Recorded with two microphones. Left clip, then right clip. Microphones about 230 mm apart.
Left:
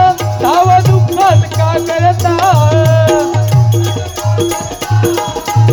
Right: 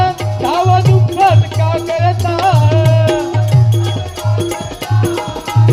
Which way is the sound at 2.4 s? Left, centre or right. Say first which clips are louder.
Left 1 dB; left.